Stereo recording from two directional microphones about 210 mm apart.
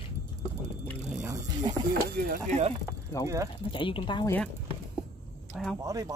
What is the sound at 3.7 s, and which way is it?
Speech, 25° left (ahead or behind).